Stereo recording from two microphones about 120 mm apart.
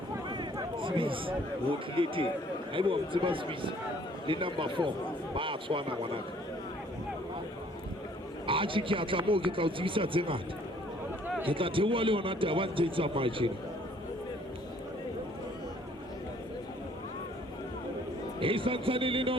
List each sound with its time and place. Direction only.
0.3 s a sound: 40° right (ahead or behind)
2.0 s a man's voice: 45° right (ahead or behind)
8.4 s a man's voice: 45° right (ahead or behind)
11.4 s a man's voice: 45° right (ahead or behind)
18.3 s a man's voice: 45° right (ahead or behind)